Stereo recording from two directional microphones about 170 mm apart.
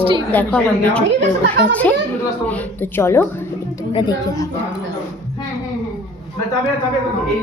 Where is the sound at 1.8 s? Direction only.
10° left (ahead or behind).